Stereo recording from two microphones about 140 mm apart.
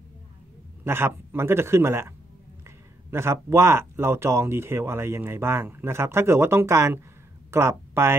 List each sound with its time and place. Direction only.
0.8 s speech: 15° right (ahead or behind)